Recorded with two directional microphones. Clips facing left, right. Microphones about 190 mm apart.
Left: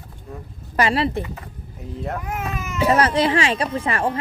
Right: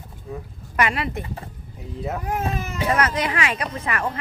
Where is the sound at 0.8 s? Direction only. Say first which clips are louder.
Left 4 dB; 30° left (ahead or behind).